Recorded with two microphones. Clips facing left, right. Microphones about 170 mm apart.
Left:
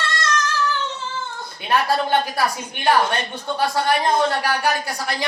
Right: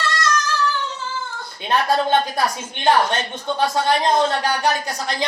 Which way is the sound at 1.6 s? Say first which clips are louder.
Right 1 dB; 20° right (ahead or behind).